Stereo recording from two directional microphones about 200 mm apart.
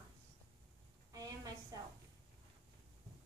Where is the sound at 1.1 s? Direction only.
20° right (ahead or behind).